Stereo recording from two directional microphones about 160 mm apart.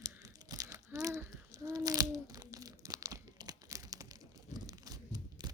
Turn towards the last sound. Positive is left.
turn(degrees=-25)  # may be behind; listen again after turning